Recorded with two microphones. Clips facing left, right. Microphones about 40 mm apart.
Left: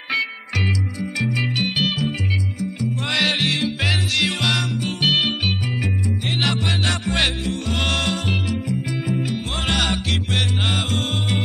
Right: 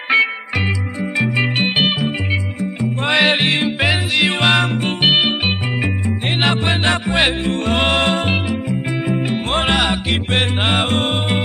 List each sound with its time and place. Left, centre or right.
1.1 s music: right
7.5 s music: right
9.8 s music: right
10.3 s music: right